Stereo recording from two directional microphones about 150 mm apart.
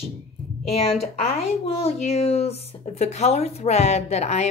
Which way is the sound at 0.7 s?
45° left (ahead or behind).